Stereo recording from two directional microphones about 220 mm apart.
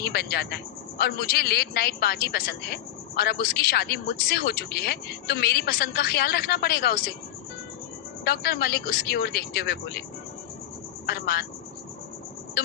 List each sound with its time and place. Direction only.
0.0 s speech: 45° left (ahead or behind)
8.2 s speech: 45° left (ahead or behind)
11.0 s speech: 45° left (ahead or behind)
12.6 s music: 45° left (ahead or behind)